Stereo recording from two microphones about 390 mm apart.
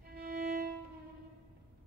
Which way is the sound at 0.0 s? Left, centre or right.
Right.